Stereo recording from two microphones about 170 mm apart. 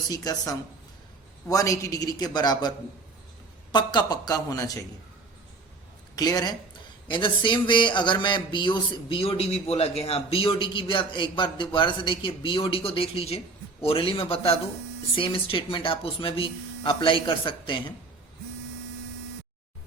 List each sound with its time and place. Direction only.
0.1 s speech: 20° left (ahead or behind)
6.1 s speech: 25° left (ahead or behind)